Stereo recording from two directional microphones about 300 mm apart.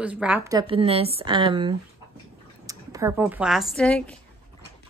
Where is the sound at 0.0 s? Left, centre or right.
Centre.